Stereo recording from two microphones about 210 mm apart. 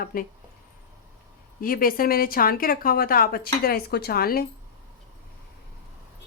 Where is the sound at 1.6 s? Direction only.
45° left (ahead or behind).